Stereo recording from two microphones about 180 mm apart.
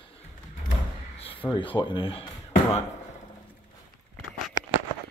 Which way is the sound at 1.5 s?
25° left (ahead or behind).